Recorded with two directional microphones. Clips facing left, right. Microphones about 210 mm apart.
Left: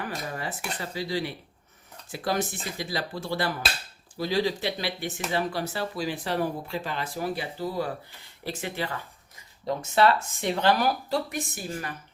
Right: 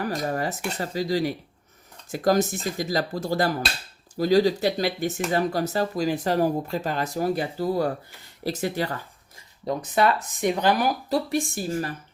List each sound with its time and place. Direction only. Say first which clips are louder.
0.0 s speech: right 7 dB; 40° right (ahead or behind)
9.9 s speech: left 1 dB; 15° right (ahead or behind)
11.3 s speech: right 7 dB; 35° right (ahead or behind)